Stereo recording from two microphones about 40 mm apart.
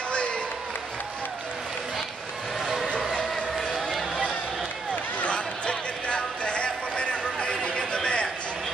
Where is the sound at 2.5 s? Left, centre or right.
Centre.